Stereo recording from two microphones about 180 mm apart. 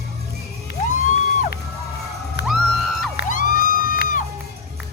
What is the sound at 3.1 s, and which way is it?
Music, 45° left (ahead or behind).